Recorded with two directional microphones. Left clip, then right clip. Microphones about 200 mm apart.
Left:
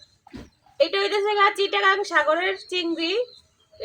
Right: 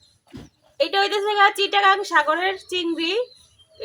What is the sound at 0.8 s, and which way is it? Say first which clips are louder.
A woman's voice: right 1 dB; 5° right (ahead or behind).